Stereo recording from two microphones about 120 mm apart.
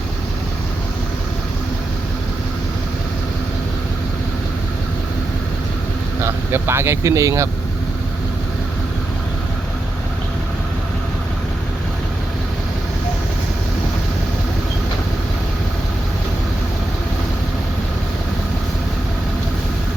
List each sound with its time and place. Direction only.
6.2 s speech: 20° right (ahead or behind)